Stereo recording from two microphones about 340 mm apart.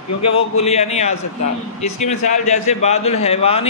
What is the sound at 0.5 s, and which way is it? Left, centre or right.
A man's voice, centre.